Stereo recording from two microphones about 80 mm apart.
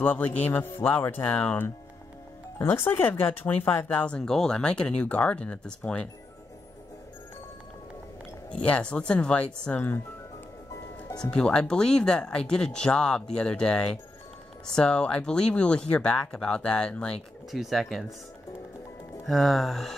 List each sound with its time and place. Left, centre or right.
0.0 s speech: left
4.2 s speech: centre
8.5 s speech: centre
11.1 s speech: centre
17.5 s speech: centre
19.2 s speech: centre